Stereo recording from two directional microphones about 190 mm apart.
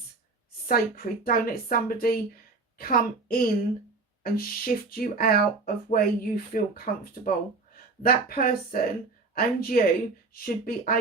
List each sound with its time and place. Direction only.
0.7 s a woman's voice: 50° left (ahead or behind)